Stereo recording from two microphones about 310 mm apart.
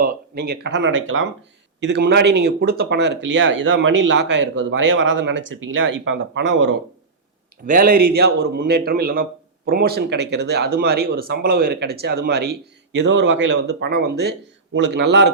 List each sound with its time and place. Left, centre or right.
0.0 s speech: right
7.7 s a man's voice: right